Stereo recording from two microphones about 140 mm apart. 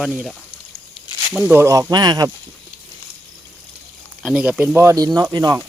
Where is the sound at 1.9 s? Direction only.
30° right (ahead or behind).